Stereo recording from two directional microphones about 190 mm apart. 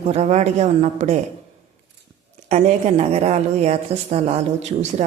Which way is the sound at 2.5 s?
35° right (ahead or behind).